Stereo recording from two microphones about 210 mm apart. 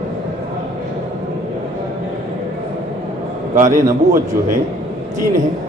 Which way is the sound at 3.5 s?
35° right (ahead or behind).